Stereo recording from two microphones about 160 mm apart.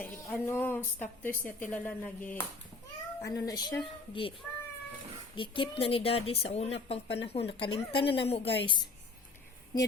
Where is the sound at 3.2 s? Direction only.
20° left (ahead or behind).